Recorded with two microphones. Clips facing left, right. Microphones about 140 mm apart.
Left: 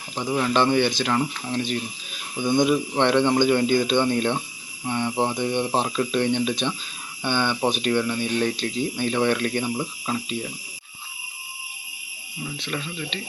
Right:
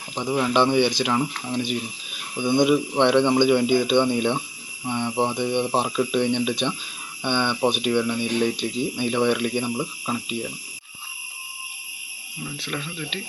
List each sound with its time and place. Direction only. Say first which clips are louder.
0.3 s speech: right 1 dB; 10° right (ahead or behind)
12.5 s speech: even; 5° right (ahead or behind)